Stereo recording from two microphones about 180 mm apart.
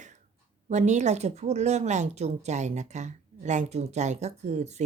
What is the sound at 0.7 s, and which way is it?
A woman's voice, 40° right (ahead or behind).